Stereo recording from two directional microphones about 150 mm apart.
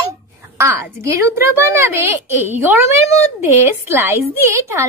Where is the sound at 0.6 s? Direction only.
20° right (ahead or behind).